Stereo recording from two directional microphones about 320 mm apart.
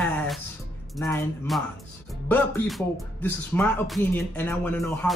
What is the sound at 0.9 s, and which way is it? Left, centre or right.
Speech, centre.